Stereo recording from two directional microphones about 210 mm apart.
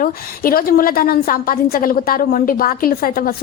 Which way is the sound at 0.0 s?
45° left (ahead or behind).